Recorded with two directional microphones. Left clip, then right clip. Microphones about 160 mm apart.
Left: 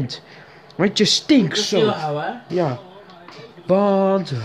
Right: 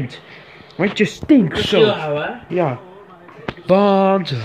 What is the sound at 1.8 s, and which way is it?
Speech, 55° left (ahead or behind).